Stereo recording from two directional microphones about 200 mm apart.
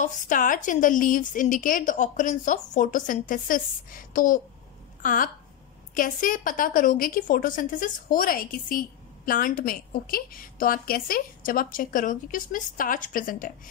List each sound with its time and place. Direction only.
0.0 s a woman's voice: 40° left (ahead or behind)